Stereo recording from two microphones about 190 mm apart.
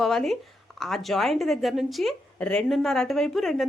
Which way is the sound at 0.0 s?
Centre (ahead or behind).